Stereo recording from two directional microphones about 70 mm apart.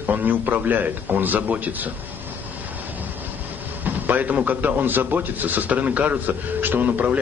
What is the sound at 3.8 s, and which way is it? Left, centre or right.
A man's voice, right.